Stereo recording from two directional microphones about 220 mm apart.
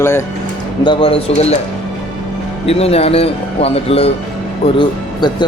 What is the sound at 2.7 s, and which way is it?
Speech, 25° left (ahead or behind).